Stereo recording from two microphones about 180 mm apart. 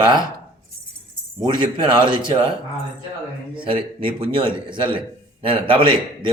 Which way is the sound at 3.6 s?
30° right (ahead or behind).